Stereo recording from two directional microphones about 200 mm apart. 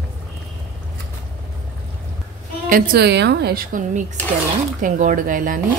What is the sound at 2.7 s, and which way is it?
Speech, 45° right (ahead or behind).